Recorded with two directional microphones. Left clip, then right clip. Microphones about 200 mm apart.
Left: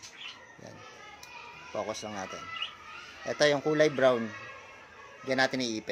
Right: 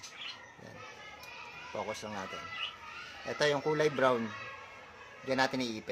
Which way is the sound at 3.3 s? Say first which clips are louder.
Left 4 dB; 15° left (ahead or behind).